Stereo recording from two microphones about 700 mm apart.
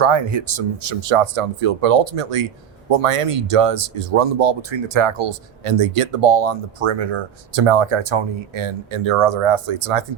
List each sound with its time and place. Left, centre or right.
0.0 s speech: right